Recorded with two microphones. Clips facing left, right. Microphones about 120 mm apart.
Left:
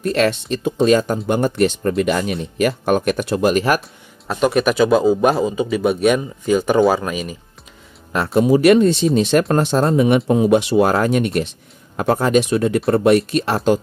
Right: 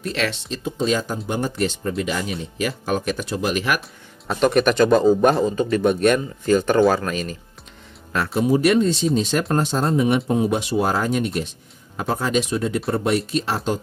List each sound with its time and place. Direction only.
0.0 s speech: 45° left (ahead or behind)
4.3 s a man's voice: 5° left (ahead or behind)
8.4 s speech: 65° left (ahead or behind)